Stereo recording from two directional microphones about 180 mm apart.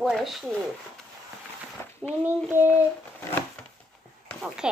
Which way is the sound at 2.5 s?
10° right (ahead or behind).